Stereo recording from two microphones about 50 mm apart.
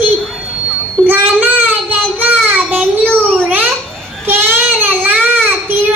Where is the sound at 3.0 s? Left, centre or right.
Left.